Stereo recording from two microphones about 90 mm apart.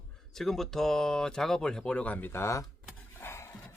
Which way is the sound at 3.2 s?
30° left (ahead or behind).